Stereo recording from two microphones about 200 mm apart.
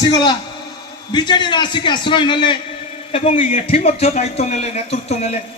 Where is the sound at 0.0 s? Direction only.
20° left (ahead or behind).